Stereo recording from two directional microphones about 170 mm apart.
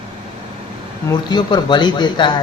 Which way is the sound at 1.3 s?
25° left (ahead or behind).